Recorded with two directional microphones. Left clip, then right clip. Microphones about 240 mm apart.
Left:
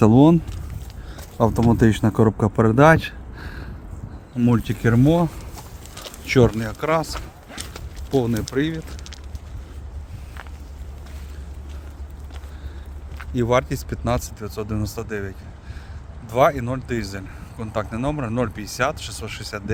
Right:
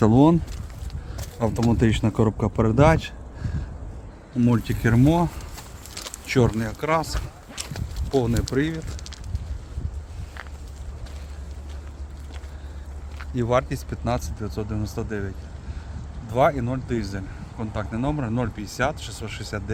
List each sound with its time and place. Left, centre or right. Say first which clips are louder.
0.0 s speech: left 3 dB; centre
1.4 s a man's voice: left 5 dB; centre
4.4 s speech: left 2 dB; centre
8.1 s speech: left 1 dB; centre
13.1 s a man's voice: left 3 dB; centre
16.3 s a man's voice: left 3 dB; left